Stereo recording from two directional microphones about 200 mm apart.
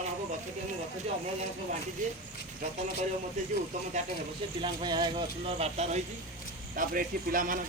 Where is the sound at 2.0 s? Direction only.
40° right (ahead or behind).